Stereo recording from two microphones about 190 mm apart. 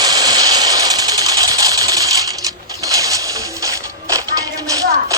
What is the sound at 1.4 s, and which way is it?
Sewing machine, 20° right (ahead or behind).